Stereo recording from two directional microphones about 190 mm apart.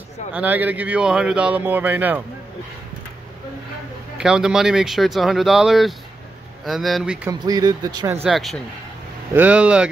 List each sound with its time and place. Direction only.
0.3 s speech: 10° right (ahead or behind)
4.2 s speech: 5° right (ahead or behind)
7.2 s speech: 20° right (ahead or behind)
8.3 s speech: centre (ahead or behind)